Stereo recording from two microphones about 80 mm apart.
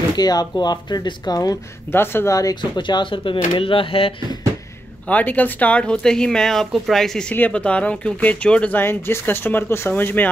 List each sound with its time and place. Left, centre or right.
0.1 s speech: left
1.9 s speech: left
2.6 s speech: left
5.0 s speech: centre
7.3 s speech: centre
8.7 s speech: left